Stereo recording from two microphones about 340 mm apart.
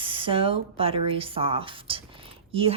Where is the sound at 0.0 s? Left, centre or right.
Centre.